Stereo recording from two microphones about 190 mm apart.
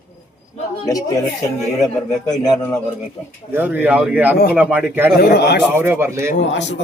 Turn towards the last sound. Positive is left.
turn(degrees=70)  # may be behind; listen again after turning